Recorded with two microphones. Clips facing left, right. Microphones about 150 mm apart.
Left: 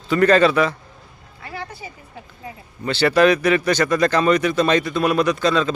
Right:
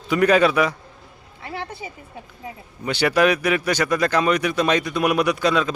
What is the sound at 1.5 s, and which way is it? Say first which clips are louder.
Speech: right 1 dB; 25° right (ahead or behind).